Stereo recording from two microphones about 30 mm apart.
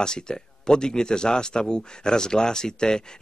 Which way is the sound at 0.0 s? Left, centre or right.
Left.